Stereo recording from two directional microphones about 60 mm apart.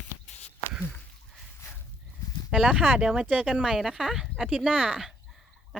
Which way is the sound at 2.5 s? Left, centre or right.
Centre.